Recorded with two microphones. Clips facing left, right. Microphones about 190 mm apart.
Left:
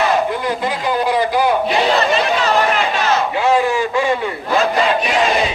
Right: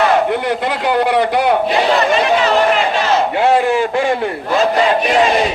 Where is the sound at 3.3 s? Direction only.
50° right (ahead or behind).